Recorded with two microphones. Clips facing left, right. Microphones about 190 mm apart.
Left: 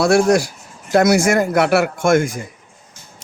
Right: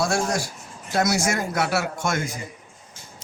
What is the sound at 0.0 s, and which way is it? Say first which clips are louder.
Speech: left 10 dB; 70° left (ahead or behind).